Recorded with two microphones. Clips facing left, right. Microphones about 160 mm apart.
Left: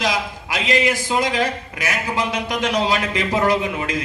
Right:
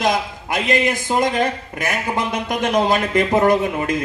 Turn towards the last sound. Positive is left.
turn(degrees=-50)  # may be behind; listen again after turning